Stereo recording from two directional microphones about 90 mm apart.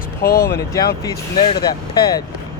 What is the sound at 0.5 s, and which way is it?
Speech, 35° left (ahead or behind).